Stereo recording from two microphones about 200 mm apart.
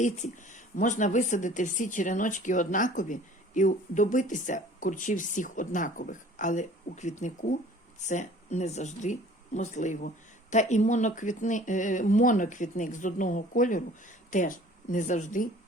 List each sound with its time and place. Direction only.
0.0 s speech: 40° left (ahead or behind)